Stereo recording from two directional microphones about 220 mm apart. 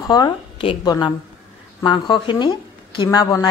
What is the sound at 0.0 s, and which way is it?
A woman's voice, 15° left (ahead or behind).